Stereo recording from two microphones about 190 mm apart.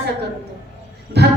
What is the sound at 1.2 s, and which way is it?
Speech, 60° right (ahead or behind).